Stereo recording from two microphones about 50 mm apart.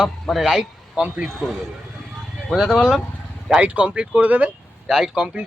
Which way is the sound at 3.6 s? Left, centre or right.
Right.